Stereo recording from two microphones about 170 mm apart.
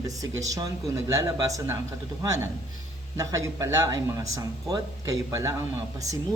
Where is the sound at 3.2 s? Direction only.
20° right (ahead or behind).